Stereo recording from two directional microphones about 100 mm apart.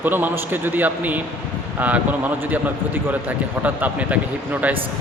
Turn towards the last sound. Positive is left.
turn(degrees=-15)  # may be behind; listen again after turning